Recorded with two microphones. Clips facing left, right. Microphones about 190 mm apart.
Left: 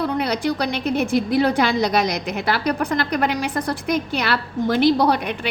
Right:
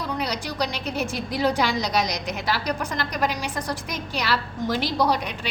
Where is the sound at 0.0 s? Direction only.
60° left (ahead or behind).